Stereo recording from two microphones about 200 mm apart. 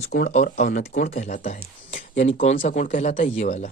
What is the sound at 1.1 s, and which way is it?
A man's voice, 35° left (ahead or behind).